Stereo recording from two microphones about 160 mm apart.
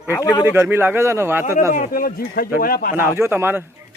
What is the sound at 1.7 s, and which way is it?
Speech, 60° left (ahead or behind).